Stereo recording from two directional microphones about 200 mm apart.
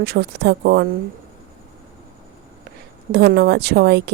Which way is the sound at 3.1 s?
50° right (ahead or behind).